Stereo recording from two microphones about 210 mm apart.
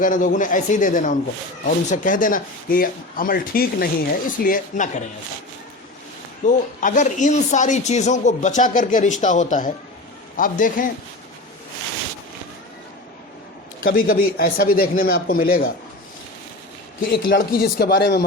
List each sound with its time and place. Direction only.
0.0 s speech: 40° left (ahead or behind)
6.4 s speech: 35° left (ahead or behind)
13.8 s a man's voice: 45° left (ahead or behind)
17.1 s a man's voice: 45° left (ahead or behind)